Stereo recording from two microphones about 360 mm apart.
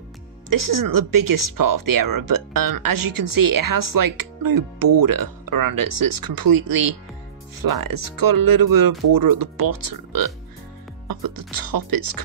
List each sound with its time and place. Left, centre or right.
0.5 s speech: right